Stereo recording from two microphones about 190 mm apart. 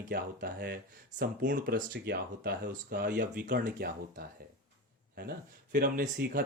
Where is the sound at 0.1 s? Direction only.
50° right (ahead or behind).